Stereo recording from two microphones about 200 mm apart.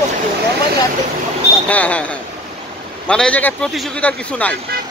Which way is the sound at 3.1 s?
5° left (ahead or behind).